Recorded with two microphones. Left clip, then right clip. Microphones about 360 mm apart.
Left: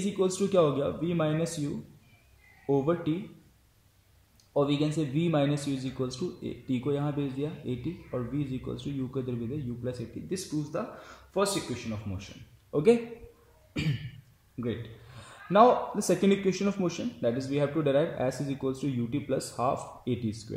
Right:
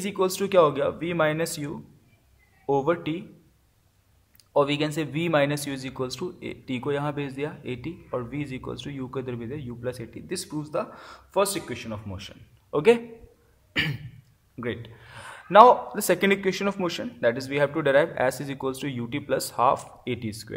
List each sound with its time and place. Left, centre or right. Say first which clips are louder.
0.0 s a man's voice: right 3 dB; right
2.7 s a man's voice: right 4 dB; right
4.6 s a man's voice: right 4 dB; right
14.6 s a man's voice: right 3 dB; right